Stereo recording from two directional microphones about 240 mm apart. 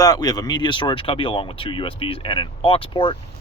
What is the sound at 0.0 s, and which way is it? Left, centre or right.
Speech, centre.